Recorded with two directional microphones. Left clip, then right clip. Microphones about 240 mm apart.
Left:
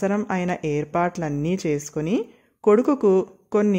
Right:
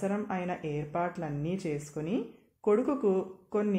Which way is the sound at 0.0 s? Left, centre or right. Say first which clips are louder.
Left 9 dB; left.